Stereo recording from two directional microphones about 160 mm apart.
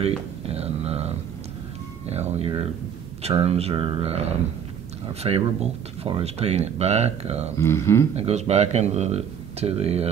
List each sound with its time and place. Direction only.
0.0 s speech: 40° right (ahead or behind)
7.5 s speech: 15° left (ahead or behind)
8.2 s speech: 40° right (ahead or behind)